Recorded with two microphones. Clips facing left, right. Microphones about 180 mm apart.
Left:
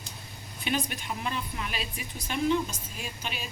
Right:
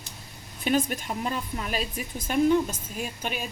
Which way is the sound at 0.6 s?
45° right (ahead or behind).